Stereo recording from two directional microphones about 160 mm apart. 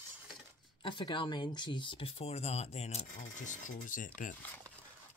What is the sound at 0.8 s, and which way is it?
Speech, 30° left (ahead or behind).